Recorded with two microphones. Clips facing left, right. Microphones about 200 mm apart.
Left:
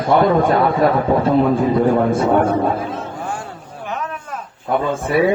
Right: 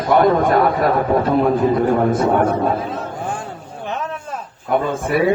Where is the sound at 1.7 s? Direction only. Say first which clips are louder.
Left 1 dB; 30° left (ahead or behind).